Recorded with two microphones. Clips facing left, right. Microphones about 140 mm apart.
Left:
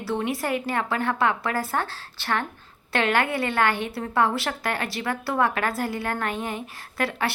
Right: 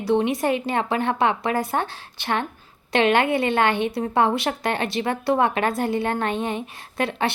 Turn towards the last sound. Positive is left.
turn(degrees=-20)  # may be behind; listen again after turning